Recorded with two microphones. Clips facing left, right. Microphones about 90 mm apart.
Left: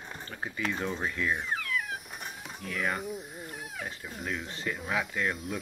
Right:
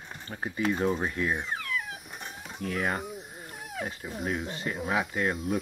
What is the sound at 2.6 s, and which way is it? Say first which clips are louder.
Speech: right 3 dB; 40° right (ahead or behind).